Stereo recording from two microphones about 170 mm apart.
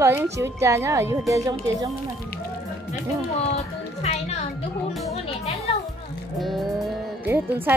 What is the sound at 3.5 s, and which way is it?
Music, 40° left (ahead or behind).